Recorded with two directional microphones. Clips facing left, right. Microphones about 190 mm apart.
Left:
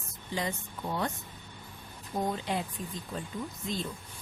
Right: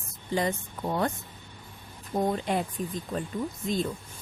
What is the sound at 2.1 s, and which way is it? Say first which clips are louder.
Speech: right 5 dB; 55° right (ahead or behind).